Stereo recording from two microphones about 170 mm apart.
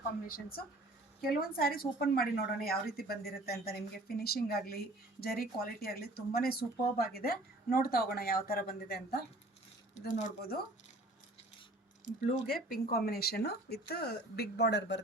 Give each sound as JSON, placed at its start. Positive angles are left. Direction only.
{"t": 0.3, "sound": "a woman's voice", "side_deg": 60}
{"t": 10.1, "sound": "speech", "side_deg": 45}
{"t": 12.3, "sound": "speech", "side_deg": 60}